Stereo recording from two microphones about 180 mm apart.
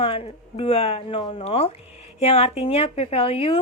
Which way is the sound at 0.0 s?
30° left (ahead or behind).